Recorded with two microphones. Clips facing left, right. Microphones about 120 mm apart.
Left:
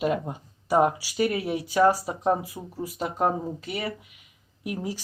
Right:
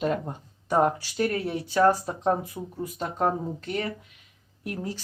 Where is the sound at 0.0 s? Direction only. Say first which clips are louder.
Left 1 dB; 5° left (ahead or behind).